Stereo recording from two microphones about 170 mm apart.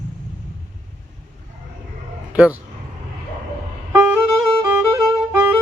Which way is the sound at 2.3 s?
5° right (ahead or behind).